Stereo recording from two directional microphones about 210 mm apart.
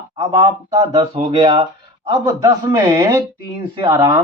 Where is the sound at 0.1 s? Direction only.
15° right (ahead or behind).